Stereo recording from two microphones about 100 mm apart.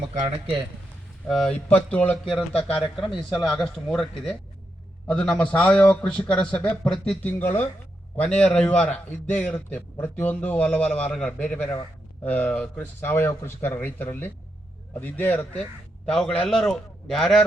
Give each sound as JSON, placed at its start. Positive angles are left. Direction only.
{"t": 1.3, "sound": "speech", "side_deg": 0}
{"t": 1.7, "sound": "a man's voice", "side_deg": 15}
{"t": 2.9, "sound": "a man's voice", "side_deg": 0}
{"t": 7.2, "sound": "a man's voice", "side_deg": 20}
{"t": 16.0, "sound": "speech", "side_deg": 5}